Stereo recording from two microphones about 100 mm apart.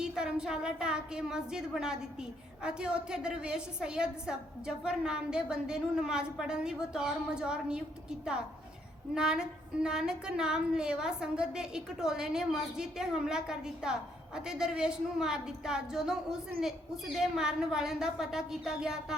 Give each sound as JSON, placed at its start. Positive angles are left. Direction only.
{"t": 0.0, "sound": "a woman's voice", "side_deg": -10}
{"t": 9.1, "sound": "a woman's voice", "side_deg": -5}